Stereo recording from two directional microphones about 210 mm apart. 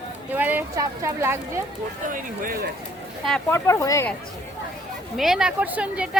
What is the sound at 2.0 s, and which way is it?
Speech, 40° right (ahead or behind).